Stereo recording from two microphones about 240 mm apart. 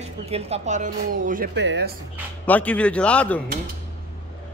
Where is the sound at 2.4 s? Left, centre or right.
Centre.